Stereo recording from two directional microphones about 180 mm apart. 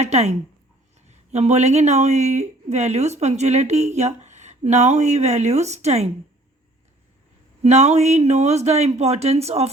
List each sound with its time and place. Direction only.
0.0 s speech: 35° right (ahead or behind)
7.6 s speech: 35° right (ahead or behind)